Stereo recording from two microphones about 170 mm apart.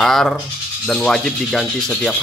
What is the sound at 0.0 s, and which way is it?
Speech, centre (ahead or behind).